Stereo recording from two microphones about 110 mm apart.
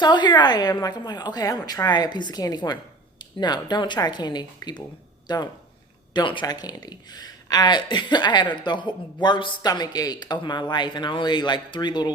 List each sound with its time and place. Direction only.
0.0 s a woman's voice: 40° left (ahead or behind)